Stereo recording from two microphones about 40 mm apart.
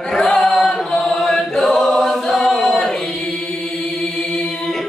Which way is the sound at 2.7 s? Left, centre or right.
Centre.